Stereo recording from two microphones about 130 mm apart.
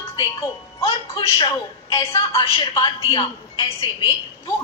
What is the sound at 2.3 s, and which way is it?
A woman's voice, 45° left (ahead or behind).